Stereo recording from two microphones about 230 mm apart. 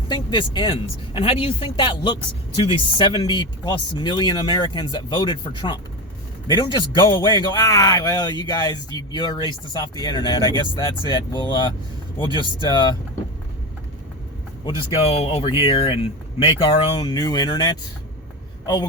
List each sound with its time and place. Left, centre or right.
0.1 s speech: left
14.6 s speech: left